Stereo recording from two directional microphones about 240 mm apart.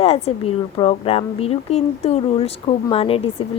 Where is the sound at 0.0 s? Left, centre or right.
Left.